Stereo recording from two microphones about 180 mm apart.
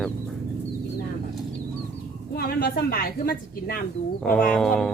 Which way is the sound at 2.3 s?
60° left (ahead or behind).